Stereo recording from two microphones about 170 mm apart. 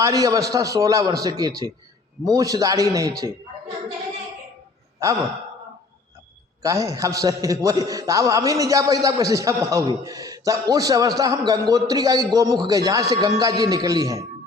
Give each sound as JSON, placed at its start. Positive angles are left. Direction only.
{"t": 0.0, "sound": "a man's voice", "side_deg": -20}
{"t": 6.6, "sound": "a man's voice", "side_deg": -20}